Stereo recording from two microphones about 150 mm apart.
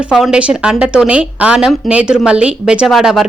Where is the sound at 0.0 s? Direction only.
5° right (ahead or behind).